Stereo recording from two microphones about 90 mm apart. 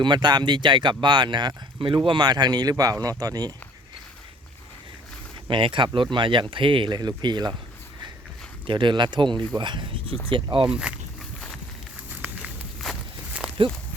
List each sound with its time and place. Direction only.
0.0 s speech: 55° right (ahead or behind)
5.5 s speech: 70° right (ahead or behind); by 7.5 s 55° right (ahead or behind)
8.6 s speech: 65° right (ahead or behind)
10.7 s speech: 10° right (ahead or behind)
12.8 s walk: centre (ahead or behind)